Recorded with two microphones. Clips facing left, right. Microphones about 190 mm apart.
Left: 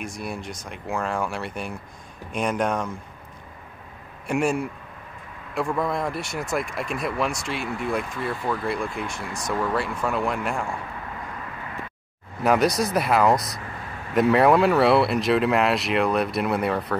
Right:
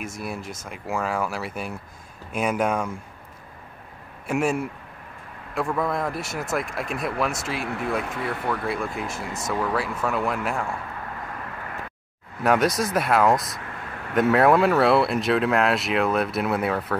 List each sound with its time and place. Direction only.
0.0 s speech: 5° right (ahead or behind)
4.3 s speech: centre (ahead or behind)
8.0 s speech: 65° right (ahead or behind)
8.5 s speech: centre (ahead or behind)
12.4 s speech: centre (ahead or behind)